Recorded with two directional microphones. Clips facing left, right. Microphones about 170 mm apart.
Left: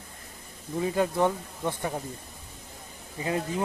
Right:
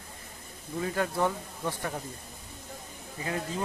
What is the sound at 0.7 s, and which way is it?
Speech, 20° left (ahead or behind).